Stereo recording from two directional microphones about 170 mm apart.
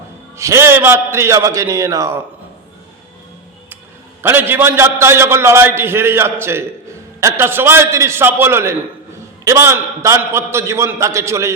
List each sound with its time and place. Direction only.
0.3 s a man's voice: 15° right (ahead or behind)
4.2 s a man's voice: 10° right (ahead or behind)